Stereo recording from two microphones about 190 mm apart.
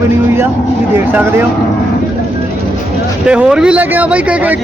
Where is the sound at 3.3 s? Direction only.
5° right (ahead or behind).